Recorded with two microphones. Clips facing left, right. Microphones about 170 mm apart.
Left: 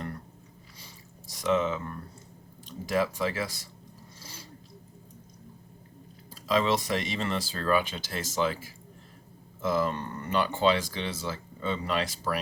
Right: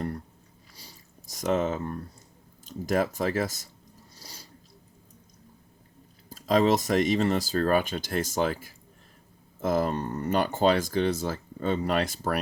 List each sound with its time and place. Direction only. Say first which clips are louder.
1.3 s speech: right 1 dB; 45° right (ahead or behind)
4.2 s a sound: left 1 dB; 40° right (ahead or behind)
6.3 s speech: right 4 dB; 45° right (ahead or behind)